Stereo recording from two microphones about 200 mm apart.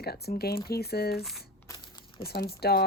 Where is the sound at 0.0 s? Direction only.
50° left (ahead or behind).